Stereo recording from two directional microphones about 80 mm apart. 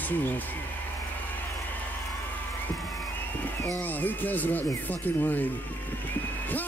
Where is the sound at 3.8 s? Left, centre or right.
Left.